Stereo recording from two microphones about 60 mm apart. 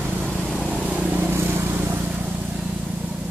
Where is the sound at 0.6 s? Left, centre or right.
Right.